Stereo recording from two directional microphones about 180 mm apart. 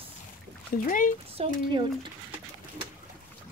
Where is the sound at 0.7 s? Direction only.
50° left (ahead or behind).